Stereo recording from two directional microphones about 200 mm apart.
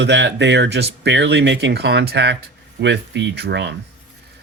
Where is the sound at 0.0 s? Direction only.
65° right (ahead or behind).